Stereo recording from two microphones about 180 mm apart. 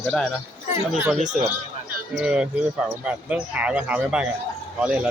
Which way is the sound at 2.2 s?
5° right (ahead or behind).